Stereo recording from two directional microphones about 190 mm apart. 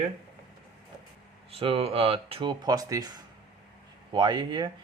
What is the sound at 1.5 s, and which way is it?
Speech, 30° right (ahead or behind).